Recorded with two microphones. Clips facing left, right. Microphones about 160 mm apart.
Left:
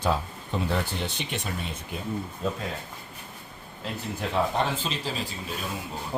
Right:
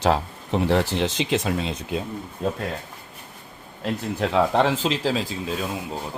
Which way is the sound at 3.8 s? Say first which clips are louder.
Right 7 dB; 85° right.